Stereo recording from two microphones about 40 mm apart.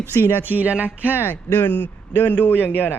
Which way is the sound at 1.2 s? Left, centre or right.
Left.